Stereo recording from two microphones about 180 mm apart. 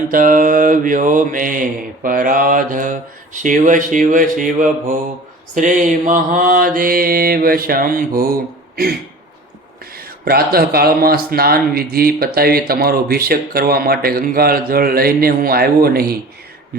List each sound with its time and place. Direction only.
0.1 s mantra: 50° right (ahead or behind)
9.9 s speech: 55° right (ahead or behind)